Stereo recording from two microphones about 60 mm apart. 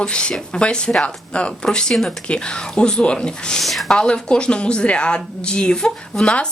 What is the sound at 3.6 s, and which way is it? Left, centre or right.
Speech, centre.